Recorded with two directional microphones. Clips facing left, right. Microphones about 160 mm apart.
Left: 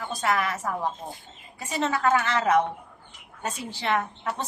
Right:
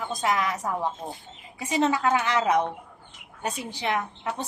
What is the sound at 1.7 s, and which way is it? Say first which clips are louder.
Speech: right 1 dB; 15° right (ahead or behind).